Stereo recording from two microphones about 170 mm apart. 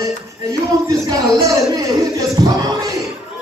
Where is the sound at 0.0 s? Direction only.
20° right (ahead or behind).